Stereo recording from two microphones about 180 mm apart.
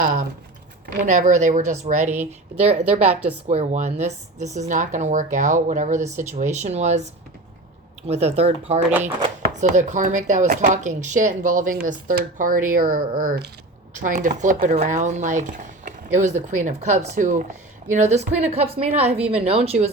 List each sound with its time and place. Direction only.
0.0 s speech: 45° right (ahead or behind)
2.9 s a woman's voice: 10° right (ahead or behind)
3.4 s speech: 40° right (ahead or behind)
8.0 s speech: 35° right (ahead or behind)
8.9 s a woman's voice: 10° right (ahead or behind)
9.4 s speech: 45° right (ahead or behind)